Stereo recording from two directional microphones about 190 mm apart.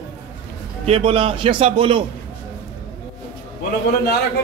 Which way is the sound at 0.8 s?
30° right (ahead or behind).